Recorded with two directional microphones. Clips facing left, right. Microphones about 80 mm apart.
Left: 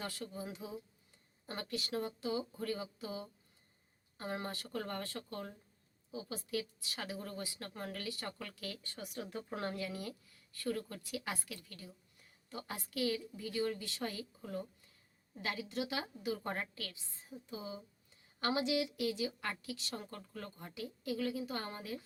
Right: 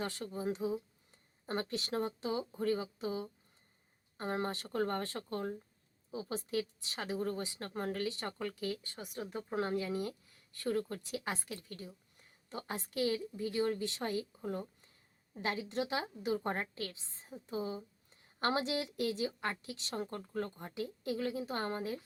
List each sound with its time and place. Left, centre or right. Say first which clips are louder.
0.0 s a woman's voice: right 5 dB; right